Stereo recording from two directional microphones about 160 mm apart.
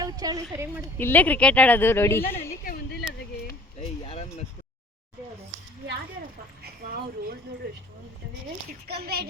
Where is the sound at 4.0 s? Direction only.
40° left (ahead or behind).